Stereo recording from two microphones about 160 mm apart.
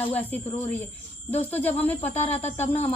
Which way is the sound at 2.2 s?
40° left (ahead or behind).